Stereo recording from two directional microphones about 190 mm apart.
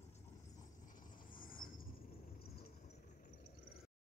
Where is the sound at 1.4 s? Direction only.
45° left (ahead or behind).